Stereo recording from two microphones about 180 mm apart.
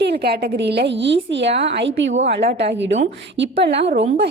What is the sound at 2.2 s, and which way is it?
A woman's voice, 70° right (ahead or behind).